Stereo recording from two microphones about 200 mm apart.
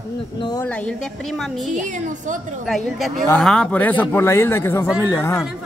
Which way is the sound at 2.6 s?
Centre (ahead or behind).